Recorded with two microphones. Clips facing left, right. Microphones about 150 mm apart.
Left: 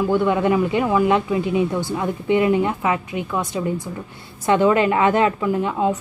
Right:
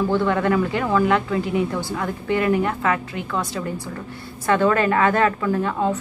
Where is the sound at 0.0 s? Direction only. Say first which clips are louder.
Left 2 dB; 15° left (ahead or behind).